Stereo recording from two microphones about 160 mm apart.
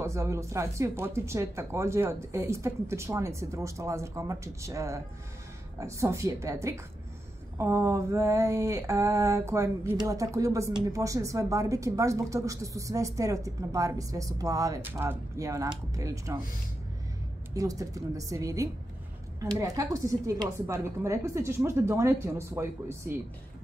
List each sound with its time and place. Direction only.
0.0 s speech: 15° right (ahead or behind)
5.8 s mantra: 20° right (ahead or behind)
17.6 s mantra: 20° right (ahead or behind)
19.6 s speech: 20° right (ahead or behind)